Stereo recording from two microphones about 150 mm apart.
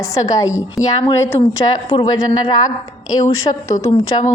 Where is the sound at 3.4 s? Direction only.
25° left (ahead or behind).